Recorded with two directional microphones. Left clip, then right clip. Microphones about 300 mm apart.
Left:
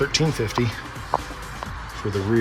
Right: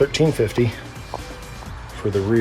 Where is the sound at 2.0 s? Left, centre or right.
Centre.